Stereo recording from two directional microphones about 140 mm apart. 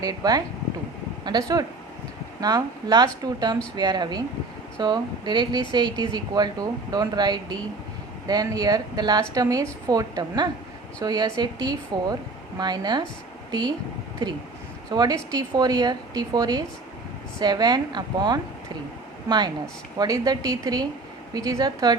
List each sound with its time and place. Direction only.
0.0 s speech: 25° right (ahead or behind)
14.8 s speech: 30° right (ahead or behind)
20.0 s speech: 30° right (ahead or behind)